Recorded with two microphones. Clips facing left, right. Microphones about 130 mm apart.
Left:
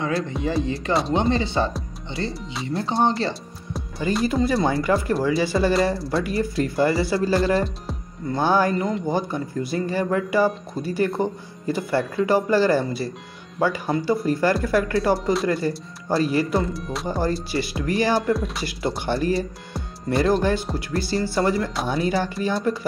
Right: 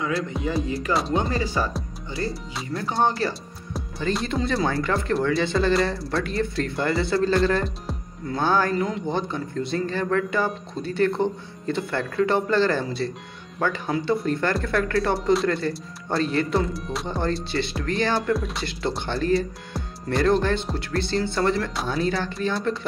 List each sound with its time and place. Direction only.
0.3 s speech: centre (ahead or behind)
1.1 s speech: 25° left (ahead or behind)
3.7 s speech: centre (ahead or behind)
8.4 s speech: 10° left (ahead or behind)
8.7 s speech: centre (ahead or behind)